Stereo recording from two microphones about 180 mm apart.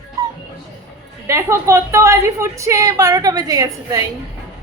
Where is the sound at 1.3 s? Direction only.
15° right (ahead or behind).